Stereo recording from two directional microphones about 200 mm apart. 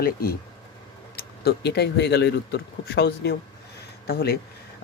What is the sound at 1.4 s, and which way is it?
Speech, 55° left (ahead or behind).